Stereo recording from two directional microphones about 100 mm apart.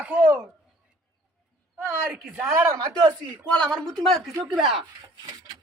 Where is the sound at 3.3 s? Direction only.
10° left (ahead or behind).